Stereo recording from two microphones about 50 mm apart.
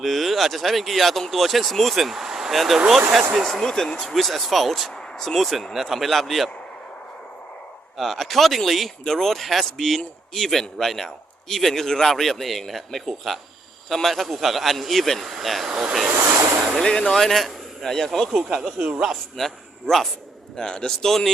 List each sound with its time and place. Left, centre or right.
0.0 s a man's voice: centre
3.4 s a man's voice: centre
7.9 s a man's voice: centre
16.1 s speech: right
16.8 s a man's voice: centre
18.8 s a man's voice: right
19.1 s a man's voice: centre